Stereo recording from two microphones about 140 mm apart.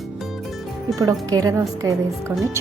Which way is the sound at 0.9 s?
25° right (ahead or behind).